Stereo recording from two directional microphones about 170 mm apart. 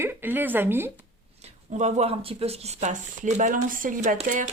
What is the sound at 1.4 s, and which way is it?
Speech, 40° right (ahead or behind).